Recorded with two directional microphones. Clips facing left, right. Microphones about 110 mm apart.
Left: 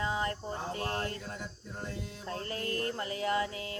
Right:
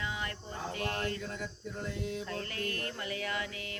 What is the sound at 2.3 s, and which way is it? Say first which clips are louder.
Music: left 2 dB; 30° left (ahead or behind).